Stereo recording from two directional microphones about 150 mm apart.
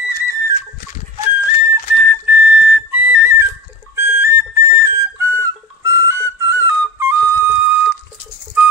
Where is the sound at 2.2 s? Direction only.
10° right (ahead or behind).